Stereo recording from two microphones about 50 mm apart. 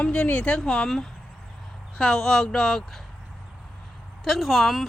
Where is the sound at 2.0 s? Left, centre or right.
Centre.